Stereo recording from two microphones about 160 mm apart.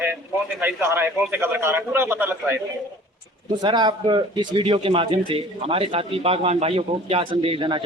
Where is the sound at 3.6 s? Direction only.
25° right (ahead or behind).